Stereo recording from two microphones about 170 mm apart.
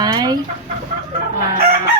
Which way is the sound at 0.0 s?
25° right (ahead or behind).